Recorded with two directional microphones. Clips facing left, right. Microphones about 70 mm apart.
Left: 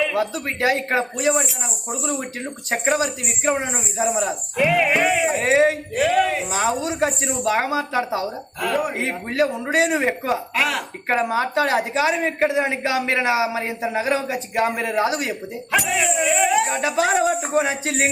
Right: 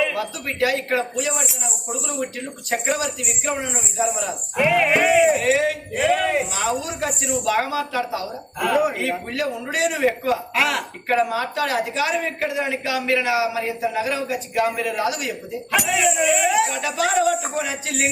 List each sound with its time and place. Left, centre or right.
0.1 s speech: left
1.1 s speech: left
2.6 s speech: left
4.5 s speech: centre
5.4 s speech: left
5.9 s speech: centre
6.5 s speech: left
8.6 s speech: centre
8.9 s speech: left
10.5 s speech: centre
11.1 s speech: left
15.9 s speech: centre
16.7 s speech: left